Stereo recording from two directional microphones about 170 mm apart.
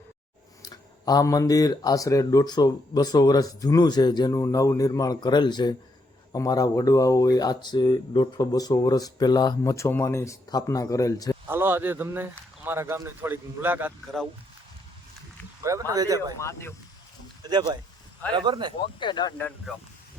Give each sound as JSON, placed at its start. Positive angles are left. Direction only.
{"t": 0.6, "sound": "speech", "side_deg": 20}
{"t": 11.4, "sound": "speech", "side_deg": -15}
{"t": 15.9, "sound": "speech", "side_deg": -20}
{"t": 16.4, "sound": "speech", "side_deg": 15}
{"t": 17.4, "sound": "a sound", "side_deg": -25}
{"t": 18.3, "sound": "speech", "side_deg": -25}
{"t": 18.9, "sound": "speech", "side_deg": 25}
{"t": 19.7, "sound": "speech", "side_deg": -5}